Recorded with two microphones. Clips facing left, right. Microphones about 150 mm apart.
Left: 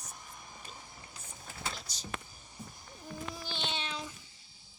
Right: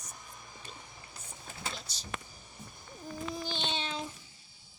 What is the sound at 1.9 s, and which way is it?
Power windows, 25° right (ahead or behind).